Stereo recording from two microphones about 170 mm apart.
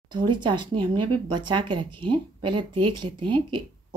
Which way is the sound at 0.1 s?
25° right (ahead or behind).